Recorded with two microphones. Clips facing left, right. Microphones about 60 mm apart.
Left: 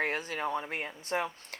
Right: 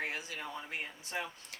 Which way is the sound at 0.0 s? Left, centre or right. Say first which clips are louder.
Left 7 dB; left.